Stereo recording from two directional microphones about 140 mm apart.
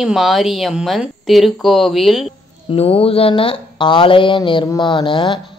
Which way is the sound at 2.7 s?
40° left (ahead or behind).